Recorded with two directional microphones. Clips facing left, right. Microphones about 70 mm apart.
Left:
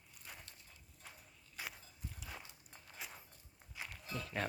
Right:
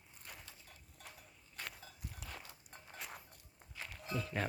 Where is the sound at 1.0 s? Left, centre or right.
Right.